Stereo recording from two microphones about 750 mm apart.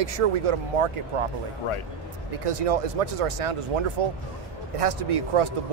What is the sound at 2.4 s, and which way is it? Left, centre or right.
Speech, right.